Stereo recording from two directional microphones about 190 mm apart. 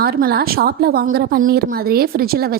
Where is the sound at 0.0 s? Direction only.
55° right (ahead or behind).